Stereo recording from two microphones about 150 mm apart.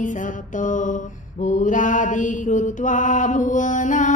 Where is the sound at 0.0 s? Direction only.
60° left (ahead or behind).